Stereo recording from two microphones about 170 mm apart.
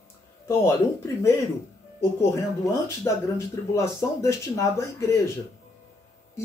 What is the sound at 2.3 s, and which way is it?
Speech, 15° left (ahead or behind).